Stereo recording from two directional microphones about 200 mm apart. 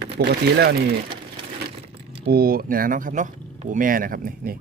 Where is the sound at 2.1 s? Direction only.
55° right (ahead or behind).